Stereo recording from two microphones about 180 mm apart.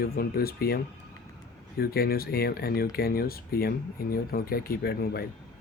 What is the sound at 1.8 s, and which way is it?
Speech, 55° left (ahead or behind).